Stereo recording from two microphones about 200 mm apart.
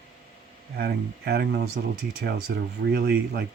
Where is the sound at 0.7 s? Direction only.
50° right (ahead or behind).